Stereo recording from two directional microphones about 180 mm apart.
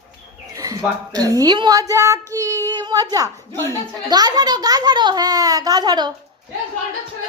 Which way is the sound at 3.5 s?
15° left (ahead or behind).